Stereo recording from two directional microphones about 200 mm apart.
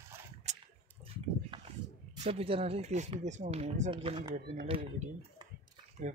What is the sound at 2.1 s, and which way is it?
Speech, 30° right (ahead or behind).